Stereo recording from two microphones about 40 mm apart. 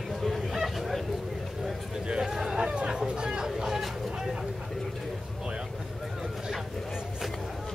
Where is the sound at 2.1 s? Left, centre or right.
Centre.